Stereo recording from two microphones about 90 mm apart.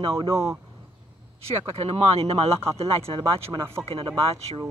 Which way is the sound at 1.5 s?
90° right.